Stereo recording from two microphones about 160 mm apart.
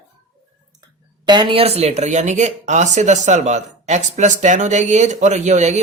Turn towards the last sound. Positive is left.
turn(degrees=-45)  # may be behind; listen again after turning